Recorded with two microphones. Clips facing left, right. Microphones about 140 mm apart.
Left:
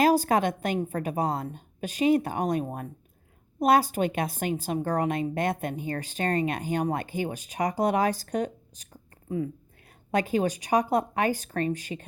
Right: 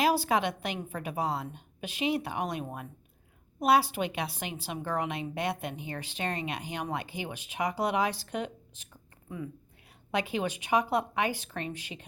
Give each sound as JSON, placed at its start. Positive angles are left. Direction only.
{"t": 0.0, "sound": "a woman's voice", "side_deg": 45}